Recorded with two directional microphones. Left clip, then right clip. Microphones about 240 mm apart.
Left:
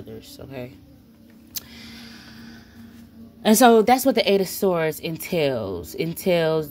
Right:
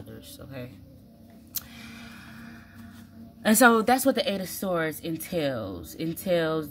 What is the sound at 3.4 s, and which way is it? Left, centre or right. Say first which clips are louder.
A woman's voice: left 5 dB; centre.